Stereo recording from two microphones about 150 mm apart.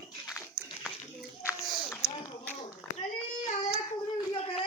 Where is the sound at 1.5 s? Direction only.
5° right (ahead or behind).